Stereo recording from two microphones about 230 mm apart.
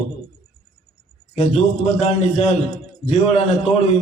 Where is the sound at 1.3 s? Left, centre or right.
Left.